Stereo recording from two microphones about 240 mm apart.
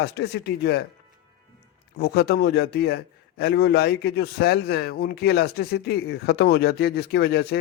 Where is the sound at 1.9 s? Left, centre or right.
Left.